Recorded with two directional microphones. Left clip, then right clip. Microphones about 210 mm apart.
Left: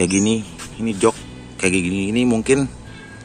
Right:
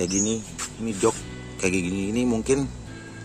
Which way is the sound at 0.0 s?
10° left (ahead or behind).